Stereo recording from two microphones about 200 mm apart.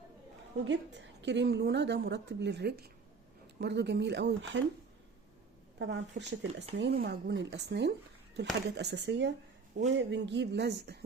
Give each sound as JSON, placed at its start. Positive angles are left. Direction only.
{"t": 0.6, "sound": "a woman's voice", "side_deg": -65}
{"t": 5.8, "sound": "a woman's voice", "side_deg": -60}